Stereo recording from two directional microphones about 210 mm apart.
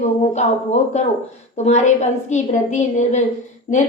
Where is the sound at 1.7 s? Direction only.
35° left (ahead or behind).